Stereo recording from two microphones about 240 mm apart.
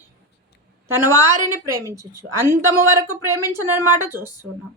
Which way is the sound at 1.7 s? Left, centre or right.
Centre.